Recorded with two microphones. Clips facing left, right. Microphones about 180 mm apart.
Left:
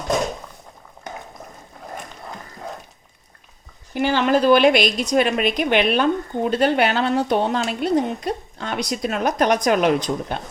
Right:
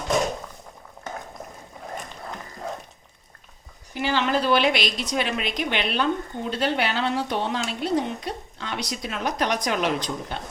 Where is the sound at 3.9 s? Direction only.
50° left (ahead or behind).